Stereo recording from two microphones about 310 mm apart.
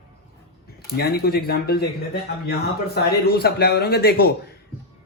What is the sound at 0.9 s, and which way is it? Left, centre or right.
A man's voice, left.